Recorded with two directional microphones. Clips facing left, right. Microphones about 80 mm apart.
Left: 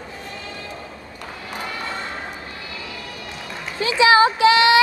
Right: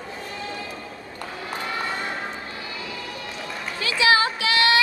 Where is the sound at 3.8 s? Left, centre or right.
Left.